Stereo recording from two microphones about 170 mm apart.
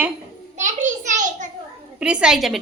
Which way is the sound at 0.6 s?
45° right (ahead or behind).